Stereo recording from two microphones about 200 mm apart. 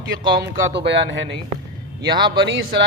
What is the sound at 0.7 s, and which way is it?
Speech, 60° right (ahead or behind).